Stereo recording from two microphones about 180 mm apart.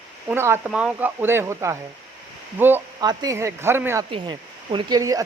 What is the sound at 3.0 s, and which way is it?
A woman's voice, 20° right (ahead or behind).